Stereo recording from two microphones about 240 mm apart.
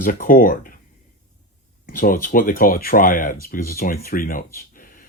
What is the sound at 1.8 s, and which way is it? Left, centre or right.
Speech, left.